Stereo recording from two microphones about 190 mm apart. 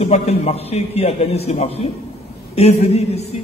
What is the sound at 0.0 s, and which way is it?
A man's voice, 35° left (ahead or behind).